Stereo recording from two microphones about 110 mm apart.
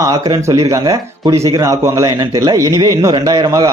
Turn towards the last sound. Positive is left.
turn(degrees=-35)  # may be behind; listen again after turning